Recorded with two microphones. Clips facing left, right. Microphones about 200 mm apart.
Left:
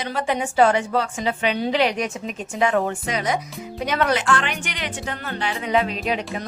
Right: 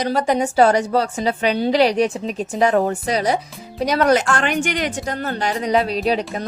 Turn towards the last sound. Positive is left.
turn(degrees=-35)  # may be behind; listen again after turning